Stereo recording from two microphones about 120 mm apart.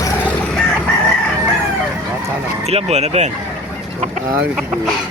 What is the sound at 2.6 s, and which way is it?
Speech, 65° right (ahead or behind).